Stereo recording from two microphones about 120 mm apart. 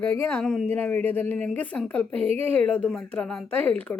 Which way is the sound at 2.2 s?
60° right (ahead or behind).